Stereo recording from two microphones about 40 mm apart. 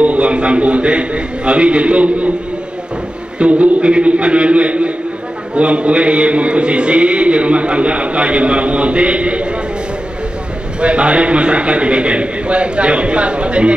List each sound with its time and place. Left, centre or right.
0.0 s a man's voice: right
3.3 s a man's voice: right
10.8 s a man's voice: right